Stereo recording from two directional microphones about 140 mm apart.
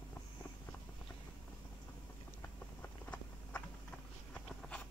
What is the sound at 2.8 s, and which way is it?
Walk, 10° left (ahead or behind).